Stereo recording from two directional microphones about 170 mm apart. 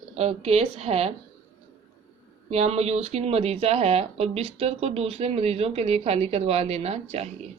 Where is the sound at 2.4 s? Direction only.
40° right (ahead or behind).